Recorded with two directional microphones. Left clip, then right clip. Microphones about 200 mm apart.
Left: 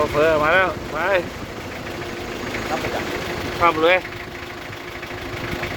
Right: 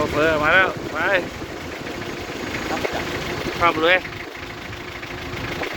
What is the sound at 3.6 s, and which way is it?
Speech, 10° left (ahead or behind).